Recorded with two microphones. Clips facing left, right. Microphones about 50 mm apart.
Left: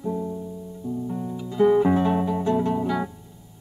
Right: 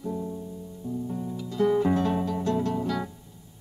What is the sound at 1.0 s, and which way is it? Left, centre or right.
Music, centre.